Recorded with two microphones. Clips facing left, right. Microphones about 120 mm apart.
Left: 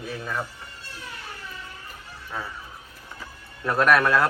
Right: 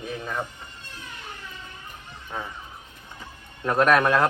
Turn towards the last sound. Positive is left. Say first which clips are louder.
# right 1 dB
turn(degrees=-20)  # may be behind; listen again after turning